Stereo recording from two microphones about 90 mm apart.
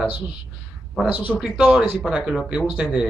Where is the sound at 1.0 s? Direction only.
15° right (ahead or behind).